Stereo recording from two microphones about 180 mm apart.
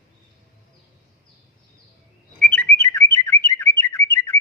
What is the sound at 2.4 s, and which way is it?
Bird, 10° left (ahead or behind).